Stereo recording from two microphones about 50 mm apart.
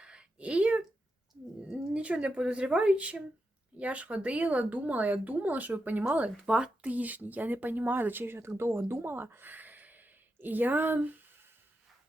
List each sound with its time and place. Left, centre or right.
0.0 s a sound: right
1.7 s speech: right
6.4 s speech: centre
6.8 s speech: right